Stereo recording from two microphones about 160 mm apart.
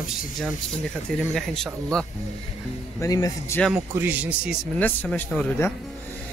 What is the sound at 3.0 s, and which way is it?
Speech, 25° left (ahead or behind).